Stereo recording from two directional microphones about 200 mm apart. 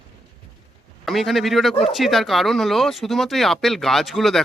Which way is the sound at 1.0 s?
Centre (ahead or behind).